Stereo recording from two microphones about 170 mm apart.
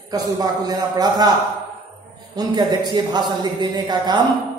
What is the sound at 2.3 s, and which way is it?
Speech, 25° right (ahead or behind).